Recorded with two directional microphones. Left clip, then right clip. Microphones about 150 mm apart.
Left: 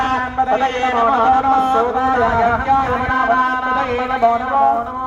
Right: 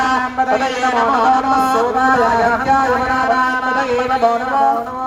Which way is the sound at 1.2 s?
10° right (ahead or behind).